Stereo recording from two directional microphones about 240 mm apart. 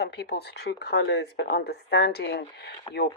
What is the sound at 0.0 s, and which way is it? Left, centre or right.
Speech, left.